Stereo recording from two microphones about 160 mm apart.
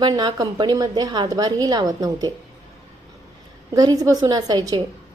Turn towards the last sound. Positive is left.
turn(degrees=-25)  # may be behind; listen again after turning